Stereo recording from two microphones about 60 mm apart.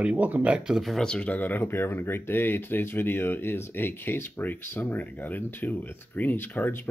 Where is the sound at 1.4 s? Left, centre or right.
Left.